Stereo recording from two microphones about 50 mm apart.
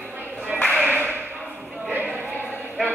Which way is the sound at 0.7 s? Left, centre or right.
Right.